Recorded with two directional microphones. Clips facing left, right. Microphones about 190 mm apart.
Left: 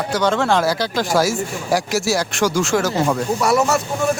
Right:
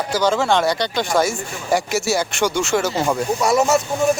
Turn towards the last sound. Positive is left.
turn(degrees=-20)  # may be behind; listen again after turning